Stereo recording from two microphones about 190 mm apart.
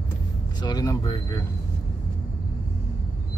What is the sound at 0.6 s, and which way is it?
Speech, 20° left (ahead or behind).